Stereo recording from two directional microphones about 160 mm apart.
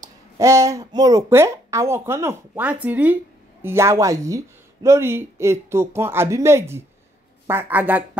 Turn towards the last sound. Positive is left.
turn(degrees=-10)  # may be behind; listen again after turning